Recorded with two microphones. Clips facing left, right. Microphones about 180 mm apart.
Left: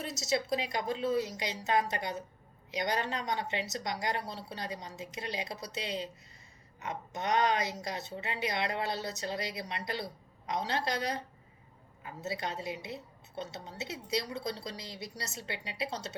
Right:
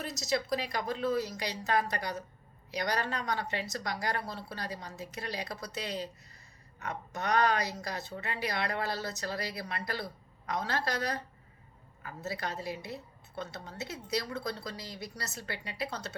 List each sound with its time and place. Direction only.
0.1 s speech: 25° left (ahead or behind)
6.7 s speech: 20° left (ahead or behind)